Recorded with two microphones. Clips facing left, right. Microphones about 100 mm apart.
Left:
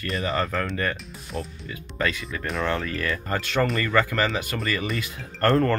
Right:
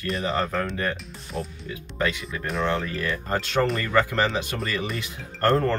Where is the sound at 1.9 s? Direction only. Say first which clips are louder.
Even; 20° right (ahead or behind).